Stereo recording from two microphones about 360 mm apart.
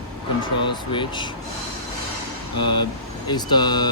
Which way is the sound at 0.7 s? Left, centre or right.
Centre.